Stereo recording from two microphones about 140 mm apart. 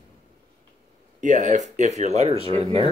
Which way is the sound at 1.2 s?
60° right (ahead or behind).